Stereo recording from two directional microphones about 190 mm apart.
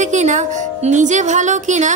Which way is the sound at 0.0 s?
40° right (ahead or behind).